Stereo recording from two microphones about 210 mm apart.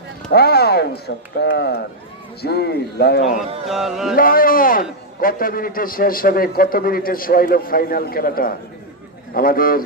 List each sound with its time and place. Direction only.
0.3 s a man's voice: 50° left (ahead or behind)
3.7 s mantra: centre (ahead or behind)
4.1 s a man's voice: 45° left (ahead or behind)